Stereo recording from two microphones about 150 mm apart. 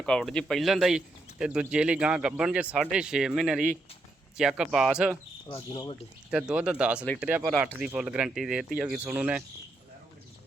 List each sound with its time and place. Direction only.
0.0 s speech: 5° left (ahead or behind)
5.5 s speech: 30° left (ahead or behind)
6.3 s speech: 5° right (ahead or behind)